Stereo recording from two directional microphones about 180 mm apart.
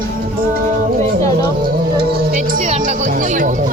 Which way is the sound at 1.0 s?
20° left (ahead or behind).